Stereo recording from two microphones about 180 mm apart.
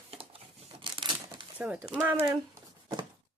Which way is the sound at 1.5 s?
10° right (ahead or behind).